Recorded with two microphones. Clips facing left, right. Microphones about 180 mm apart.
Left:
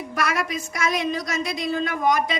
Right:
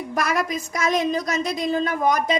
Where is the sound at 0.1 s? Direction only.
40° right (ahead or behind).